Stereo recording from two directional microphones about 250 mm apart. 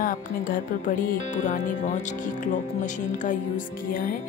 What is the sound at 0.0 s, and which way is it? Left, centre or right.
Speech, left.